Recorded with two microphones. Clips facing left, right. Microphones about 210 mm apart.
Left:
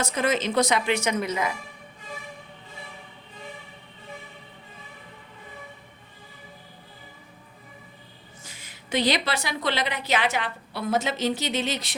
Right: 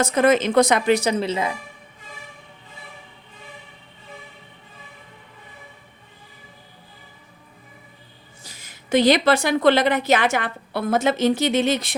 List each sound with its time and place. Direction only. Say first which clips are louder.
0.0 s a woman's voice: right 8 dB; 55° right (ahead or behind)
0.9 s a woman's voice: right 4 dB; 30° right (ahead or behind)
8.4 s a woman's voice: right 8 dB; 40° right (ahead or behind)